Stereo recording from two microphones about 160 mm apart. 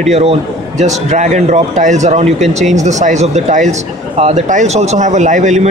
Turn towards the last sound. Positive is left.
turn(degrees=-45)  # may be behind; listen again after turning